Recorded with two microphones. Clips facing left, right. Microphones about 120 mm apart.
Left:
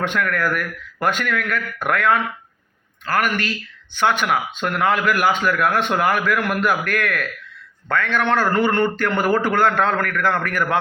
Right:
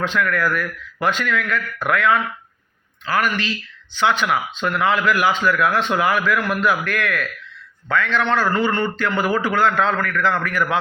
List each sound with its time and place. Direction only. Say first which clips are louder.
0.0 s a man's voice: right 1 dB; 55° left (ahead or behind)